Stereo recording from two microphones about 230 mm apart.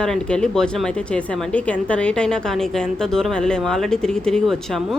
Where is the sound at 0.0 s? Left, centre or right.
Centre.